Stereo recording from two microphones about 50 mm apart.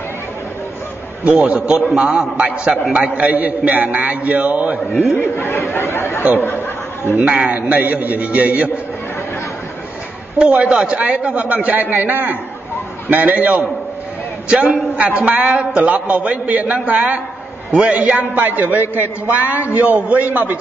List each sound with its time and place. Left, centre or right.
1.2 s a man's voice: right
3.3 s a man's voice: right
5.1 s speech: left
7.2 s a man's voice: right
10.4 s a man's voice: right
14.5 s a man's voice: right